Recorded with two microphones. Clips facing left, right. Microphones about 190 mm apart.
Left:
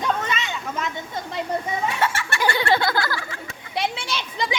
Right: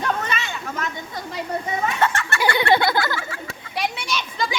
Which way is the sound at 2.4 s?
20° right (ahead or behind).